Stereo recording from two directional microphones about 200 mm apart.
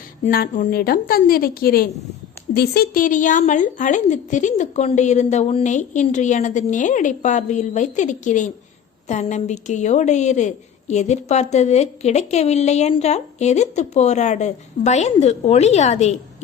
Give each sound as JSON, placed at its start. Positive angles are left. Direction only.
{"t": 0.3, "sound": "a woman's voice", "side_deg": 45}